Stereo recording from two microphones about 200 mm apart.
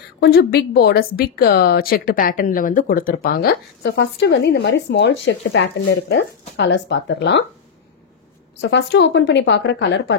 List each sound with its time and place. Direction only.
0.2 s a woman's voice: 50° left (ahead or behind)
8.5 s a woman's voice: 60° left (ahead or behind)